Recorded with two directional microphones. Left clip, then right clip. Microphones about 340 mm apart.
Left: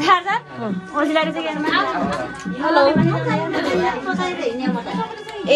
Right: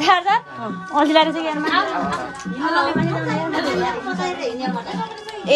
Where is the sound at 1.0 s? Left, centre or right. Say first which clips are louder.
Right 4 dB; right.